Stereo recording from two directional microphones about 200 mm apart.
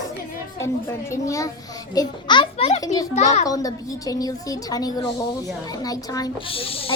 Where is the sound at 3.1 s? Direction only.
35° left (ahead or behind).